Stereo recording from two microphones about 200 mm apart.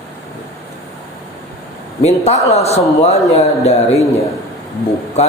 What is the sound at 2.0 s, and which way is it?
A man's voice, 35° left (ahead or behind).